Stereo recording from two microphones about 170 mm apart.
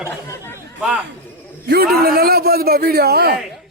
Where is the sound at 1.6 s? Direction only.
70° right (ahead or behind).